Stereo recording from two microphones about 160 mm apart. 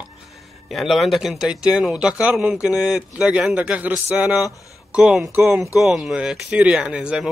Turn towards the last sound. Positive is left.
turn(degrees=-5)  # may be behind; listen again after turning